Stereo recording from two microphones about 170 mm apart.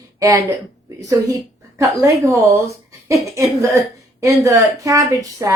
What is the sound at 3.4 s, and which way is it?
Speech, 15° right (ahead or behind).